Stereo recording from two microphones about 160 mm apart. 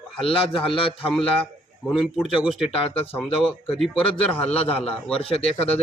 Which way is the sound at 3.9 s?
35° left (ahead or behind).